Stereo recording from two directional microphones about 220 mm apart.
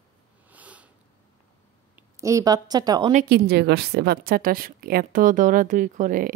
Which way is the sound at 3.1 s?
45° right (ahead or behind).